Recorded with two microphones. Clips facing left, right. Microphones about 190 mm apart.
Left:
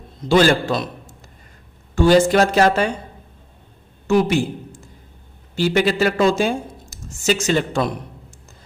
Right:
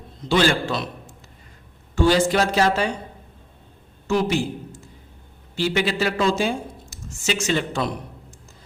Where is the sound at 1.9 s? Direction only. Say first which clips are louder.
Left 5 dB; 50° left (ahead or behind).